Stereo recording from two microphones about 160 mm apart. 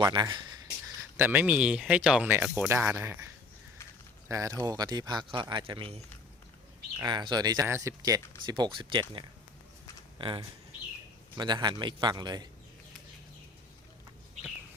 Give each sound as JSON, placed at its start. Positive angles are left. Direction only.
{"t": 0.0, "sound": "speech", "side_deg": -25}
{"t": 1.1, "sound": "speech", "side_deg": -15}
{"t": 4.3, "sound": "speech", "side_deg": -20}
{"t": 7.0, "sound": "speech", "side_deg": -25}